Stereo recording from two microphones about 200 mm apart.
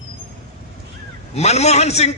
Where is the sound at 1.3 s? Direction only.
35° left (ahead or behind).